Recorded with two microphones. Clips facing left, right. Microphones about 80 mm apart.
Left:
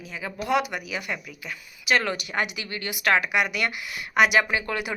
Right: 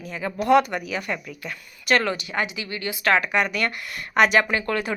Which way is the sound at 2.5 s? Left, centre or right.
Left.